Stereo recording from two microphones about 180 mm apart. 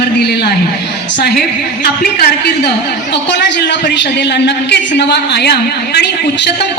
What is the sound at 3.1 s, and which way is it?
A woman's voice, 75° left (ahead or behind).